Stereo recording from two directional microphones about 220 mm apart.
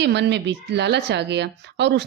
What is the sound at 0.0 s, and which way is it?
A woman's voice, 50° right (ahead or behind).